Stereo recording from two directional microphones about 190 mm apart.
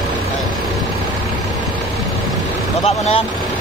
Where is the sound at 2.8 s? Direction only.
30° left (ahead or behind).